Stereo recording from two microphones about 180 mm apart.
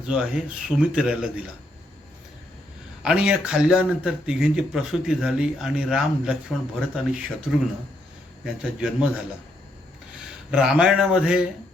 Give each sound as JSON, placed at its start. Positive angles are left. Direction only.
{"t": 0.1, "sound": "speech", "side_deg": -5}
{"t": 3.0, "sound": "speech", "side_deg": -5}
{"t": 8.4, "sound": "speech", "side_deg": 0}